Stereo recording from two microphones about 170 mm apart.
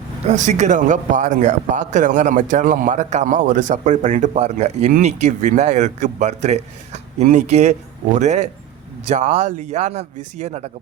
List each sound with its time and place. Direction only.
0.3 s speech: 45° right (ahead or behind)